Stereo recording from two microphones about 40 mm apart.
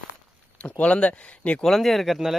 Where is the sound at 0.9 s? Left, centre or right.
Left.